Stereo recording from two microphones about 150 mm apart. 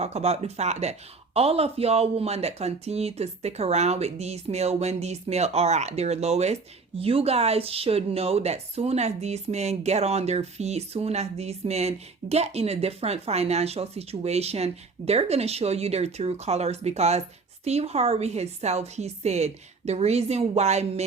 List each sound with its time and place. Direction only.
0.0 s a woman's voice: 45° right (ahead or behind)